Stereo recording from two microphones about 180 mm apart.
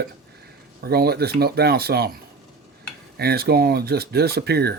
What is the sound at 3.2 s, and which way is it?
Speech, 60° right (ahead or behind).